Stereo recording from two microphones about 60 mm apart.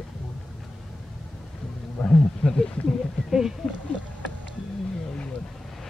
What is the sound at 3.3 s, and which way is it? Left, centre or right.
Speech, centre.